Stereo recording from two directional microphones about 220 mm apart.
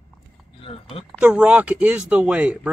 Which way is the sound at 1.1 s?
5° right (ahead or behind).